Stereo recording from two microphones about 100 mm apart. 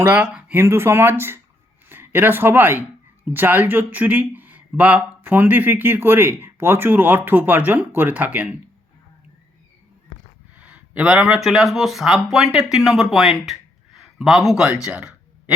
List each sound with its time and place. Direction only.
0.0 s speech: 20° right (ahead or behind)
10.5 s speech: 15° right (ahead or behind)
14.8 s a sound: 10° right (ahead or behind)